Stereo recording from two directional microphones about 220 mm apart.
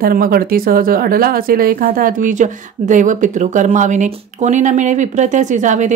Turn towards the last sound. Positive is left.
turn(degrees=-35)  # may be behind; listen again after turning